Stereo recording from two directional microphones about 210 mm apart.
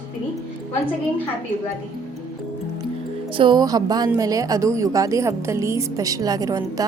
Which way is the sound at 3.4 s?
20° right (ahead or behind).